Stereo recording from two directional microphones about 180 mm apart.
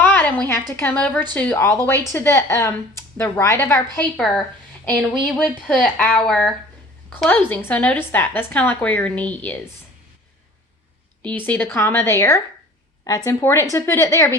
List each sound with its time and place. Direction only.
0.0 s a sound: 10° left (ahead or behind)
0.7 s a woman's voice: 10° left (ahead or behind)
3.9 s a woman's voice: centre (ahead or behind)
11.2 s a woman's voice: 10° left (ahead or behind)